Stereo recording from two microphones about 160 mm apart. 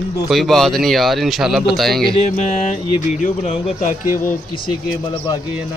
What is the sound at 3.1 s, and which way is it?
Speech, 50° left (ahead or behind).